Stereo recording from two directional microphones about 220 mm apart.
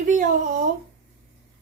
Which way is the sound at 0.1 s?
35° right (ahead or behind).